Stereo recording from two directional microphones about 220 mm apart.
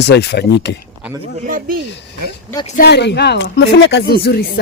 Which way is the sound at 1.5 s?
40° right (ahead or behind).